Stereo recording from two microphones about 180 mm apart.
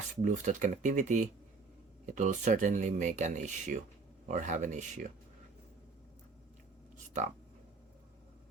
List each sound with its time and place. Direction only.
0.2 s speech: 45° right (ahead or behind)